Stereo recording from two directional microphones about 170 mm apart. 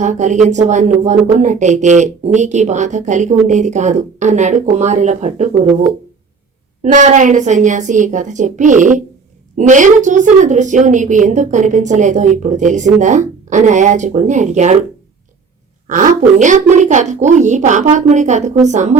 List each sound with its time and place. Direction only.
0.0 s speech: 45° right (ahead or behind)
1.1 s speech: centre (ahead or behind)
1.4 s speech: 45° right (ahead or behind)
6.8 s speech: 45° right (ahead or behind)
15.9 s speech: 50° right (ahead or behind)